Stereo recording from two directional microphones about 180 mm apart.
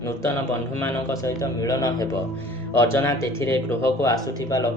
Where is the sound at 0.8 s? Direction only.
15° left (ahead or behind).